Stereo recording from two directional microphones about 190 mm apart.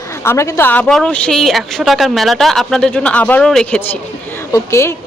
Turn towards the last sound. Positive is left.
turn(degrees=15)  # may be behind; listen again after turning